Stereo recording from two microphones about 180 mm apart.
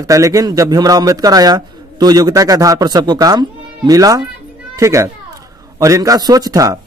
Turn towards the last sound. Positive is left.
turn(degrees=-20)  # may be behind; listen again after turning